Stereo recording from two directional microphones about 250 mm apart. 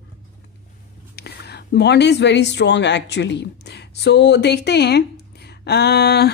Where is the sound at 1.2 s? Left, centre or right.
Left.